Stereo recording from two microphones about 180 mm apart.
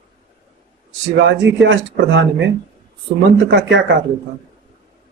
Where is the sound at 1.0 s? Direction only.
85° right.